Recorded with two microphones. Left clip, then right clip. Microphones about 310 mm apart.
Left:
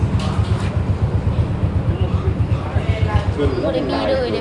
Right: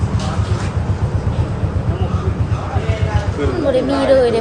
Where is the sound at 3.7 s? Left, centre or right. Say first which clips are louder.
Right 10 dB; right.